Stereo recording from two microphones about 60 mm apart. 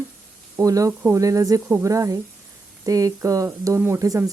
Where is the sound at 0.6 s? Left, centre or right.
Right.